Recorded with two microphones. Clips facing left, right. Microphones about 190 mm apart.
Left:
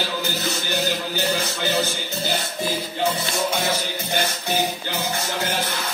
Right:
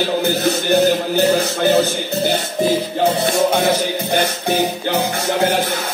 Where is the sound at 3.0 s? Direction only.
55° right (ahead or behind).